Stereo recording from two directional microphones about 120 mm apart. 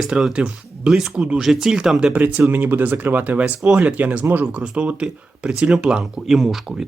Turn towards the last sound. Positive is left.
turn(degrees=0)  # may be behind; listen again after turning